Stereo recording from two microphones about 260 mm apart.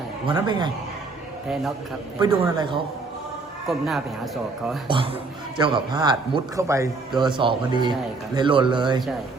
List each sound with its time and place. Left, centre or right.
0.3 s a man's voice: centre
2.2 s a man's voice: centre
3.7 s a man's voice: centre
4.9 s a man's voice: centre